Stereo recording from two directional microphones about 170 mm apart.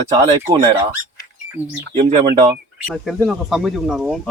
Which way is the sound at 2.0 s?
35° right (ahead or behind).